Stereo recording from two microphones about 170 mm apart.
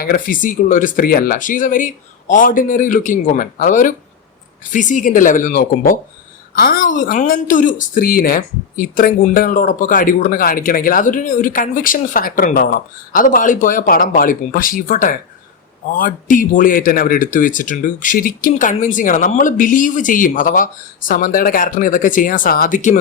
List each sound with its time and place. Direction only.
0.0 s a woman's voice: 55° left (ahead or behind)